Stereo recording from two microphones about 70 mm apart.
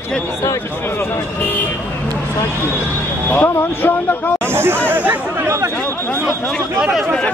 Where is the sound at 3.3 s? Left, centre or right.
Left.